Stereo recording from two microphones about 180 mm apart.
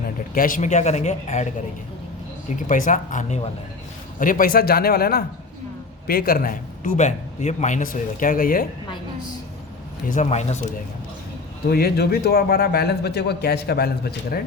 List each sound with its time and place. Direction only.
0.3 s speech: 50° left (ahead or behind)
2.6 s a man's voice: 45° left (ahead or behind)
10.1 s speech: 40° left (ahead or behind)
11.7 s a man's voice: 60° left (ahead or behind)